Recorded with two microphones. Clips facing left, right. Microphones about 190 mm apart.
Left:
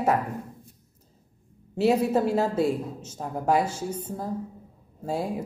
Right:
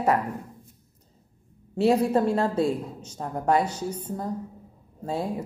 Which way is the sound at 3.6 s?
25° left (ahead or behind).